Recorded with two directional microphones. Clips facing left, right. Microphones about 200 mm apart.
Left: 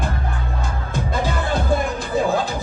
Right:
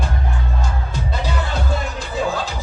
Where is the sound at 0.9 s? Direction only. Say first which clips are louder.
Left 4 dB; 50° left (ahead or behind).